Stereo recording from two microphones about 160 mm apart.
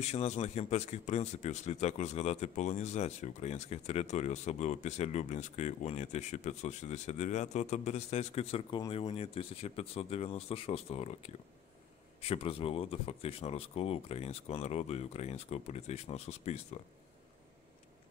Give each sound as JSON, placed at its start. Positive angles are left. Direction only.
{"t": 0.0, "sound": "speech", "side_deg": 40}